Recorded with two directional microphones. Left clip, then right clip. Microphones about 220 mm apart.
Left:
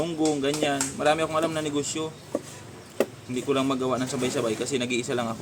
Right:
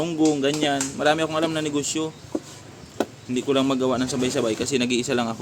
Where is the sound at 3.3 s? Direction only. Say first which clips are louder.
Right 4 dB; 35° right (ahead or behind).